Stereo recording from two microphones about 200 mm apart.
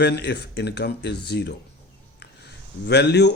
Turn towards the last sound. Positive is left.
turn(degrees=60)  # may be behind; listen again after turning